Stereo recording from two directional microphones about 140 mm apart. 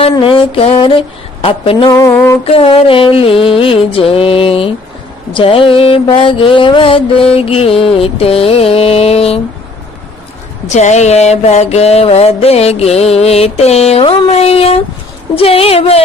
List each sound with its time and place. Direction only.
0.0 s music: 40° left (ahead or behind)
1.9 s a sound: 25° left (ahead or behind)
2.4 s music: 45° left (ahead or behind)
6.1 s mantra: 40° left (ahead or behind)
10.7 s mantra: 55° left (ahead or behind)